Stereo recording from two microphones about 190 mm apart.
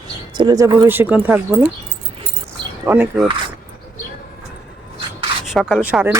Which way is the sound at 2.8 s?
10° right (ahead or behind).